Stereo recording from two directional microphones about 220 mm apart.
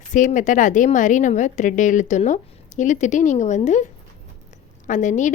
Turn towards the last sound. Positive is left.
turn(degrees=35)  # may be behind; listen again after turning